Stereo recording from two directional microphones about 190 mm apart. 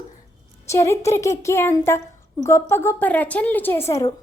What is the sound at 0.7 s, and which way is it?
A woman's voice, 15° left (ahead or behind).